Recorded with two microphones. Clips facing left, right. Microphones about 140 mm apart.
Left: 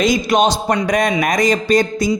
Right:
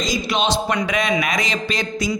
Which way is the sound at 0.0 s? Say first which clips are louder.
Left 7 dB; 50° left (ahead or behind).